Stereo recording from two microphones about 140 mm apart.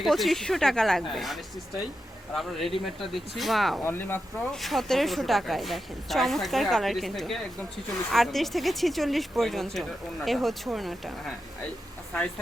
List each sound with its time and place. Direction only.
0.0 s speech: centre (ahead or behind)
3.8 s speech: 15° left (ahead or behind)
4.4 s speech: centre (ahead or behind)